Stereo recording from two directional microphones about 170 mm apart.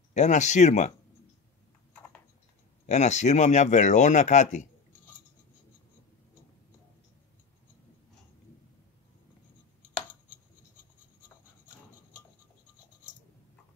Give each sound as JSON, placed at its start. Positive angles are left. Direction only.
{"t": 0.1, "sound": "speech", "side_deg": 45}
{"t": 2.9, "sound": "speech", "side_deg": 45}